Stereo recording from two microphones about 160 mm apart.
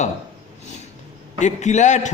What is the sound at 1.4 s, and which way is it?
Speech, 50° left (ahead or behind).